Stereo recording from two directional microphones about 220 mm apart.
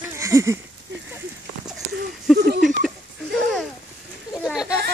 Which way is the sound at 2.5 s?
40° right (ahead or behind).